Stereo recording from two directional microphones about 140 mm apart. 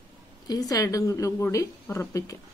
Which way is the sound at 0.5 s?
25° left (ahead or behind).